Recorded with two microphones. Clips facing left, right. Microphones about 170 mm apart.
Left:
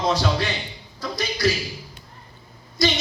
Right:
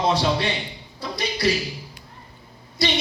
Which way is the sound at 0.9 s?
30° right (ahead or behind).